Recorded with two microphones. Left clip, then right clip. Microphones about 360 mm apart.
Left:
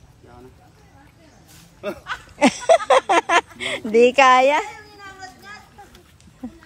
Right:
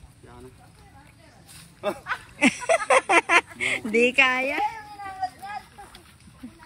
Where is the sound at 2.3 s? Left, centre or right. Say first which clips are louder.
Left 6 dB; centre.